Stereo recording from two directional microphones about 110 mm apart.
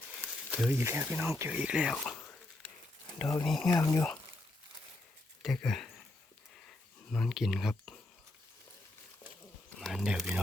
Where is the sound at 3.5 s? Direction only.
5° left (ahead or behind).